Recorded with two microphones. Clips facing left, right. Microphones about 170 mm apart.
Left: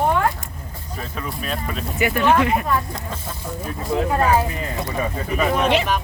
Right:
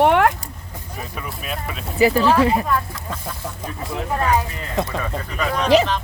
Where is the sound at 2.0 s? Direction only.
30° right (ahead or behind).